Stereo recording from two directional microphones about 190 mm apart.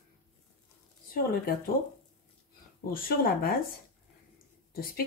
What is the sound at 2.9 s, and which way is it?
Speech, 50° left (ahead or behind).